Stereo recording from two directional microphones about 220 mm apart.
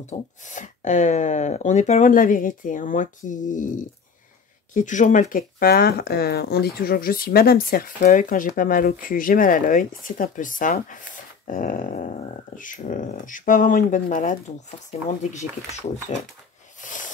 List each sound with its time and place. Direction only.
0.0 s speech: 35° left (ahead or behind)
16.8 s snake: 35° left (ahead or behind)